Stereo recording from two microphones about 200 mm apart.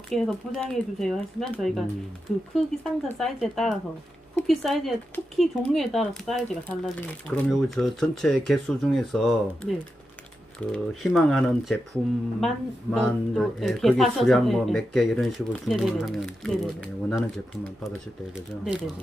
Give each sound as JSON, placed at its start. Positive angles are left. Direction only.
{"t": 0.1, "sound": "speech", "side_deg": 0}
{"t": 10.7, "sound": "speech", "side_deg": 0}